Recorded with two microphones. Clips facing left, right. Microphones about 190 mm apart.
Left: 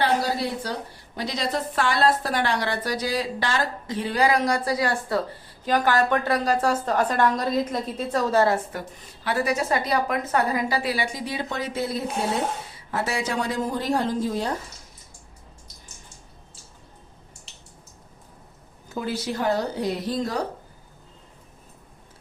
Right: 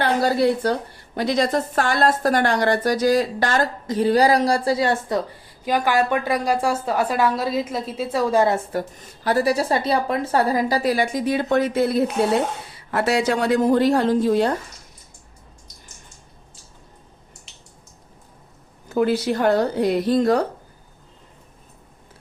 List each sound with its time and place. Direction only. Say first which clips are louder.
0.0 s a woman's voice: right 5 dB; 55° right (ahead or behind); by 5.2 s 20° right (ahead or behind)
5.6 s a woman's voice: right 1 dB; 10° right (ahead or behind)
8.7 s a woman's voice: right 8 dB; 35° right (ahead or behind); by 12.0 s 55° right (ahead or behind)
12.9 s a woman's voice: right 7 dB; 70° right (ahead or behind)
18.9 s speech: right 8 dB; 65° right (ahead or behind)